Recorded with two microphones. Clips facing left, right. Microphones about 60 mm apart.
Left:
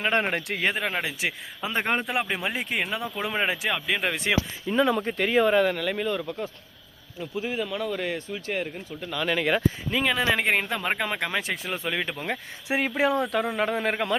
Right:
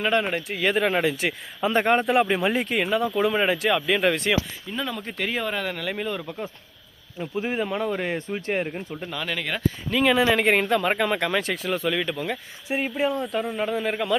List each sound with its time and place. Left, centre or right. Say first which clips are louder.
0.0 s speech: right 2 dB; left
0.3 s a man's voice: even; left
0.8 s speech: right 6 dB; centre
2.6 s speech: right 5 dB; centre
4.2 s speech: right 1 dB; centre
5.0 s speech: left 6 dB; centre
7.3 s speech: right 3 dB; right
9.2 s speech: left 4 dB; centre
11.5 s speech: right 4 dB; left
12.6 s a man's voice: left 1 dB; left